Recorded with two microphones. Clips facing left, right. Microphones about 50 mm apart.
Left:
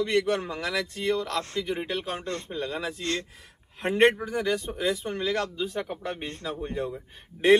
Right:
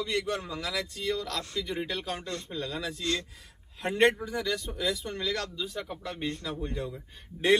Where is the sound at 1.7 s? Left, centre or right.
Left.